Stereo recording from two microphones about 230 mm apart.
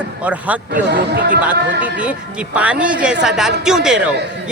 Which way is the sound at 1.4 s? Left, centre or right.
Centre.